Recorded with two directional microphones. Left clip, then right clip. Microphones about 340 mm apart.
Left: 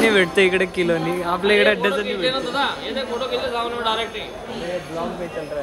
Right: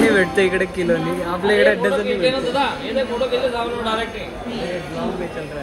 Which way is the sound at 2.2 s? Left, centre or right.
Centre.